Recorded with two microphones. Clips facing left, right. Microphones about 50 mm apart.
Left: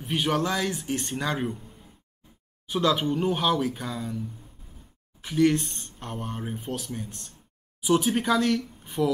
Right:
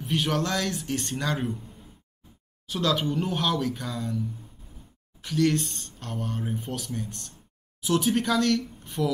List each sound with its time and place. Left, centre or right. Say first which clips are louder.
0.0 s speech: left 1 dB; centre
2.6 s speech: left 2 dB; centre
5.2 s speech: left 2 dB; centre
6.5 s speech: even; centre